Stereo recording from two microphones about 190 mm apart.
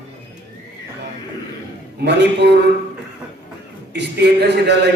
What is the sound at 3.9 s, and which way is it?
Speech, 60° right (ahead or behind).